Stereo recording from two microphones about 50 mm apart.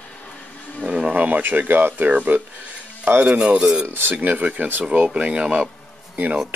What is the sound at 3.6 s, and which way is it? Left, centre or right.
Speech, centre.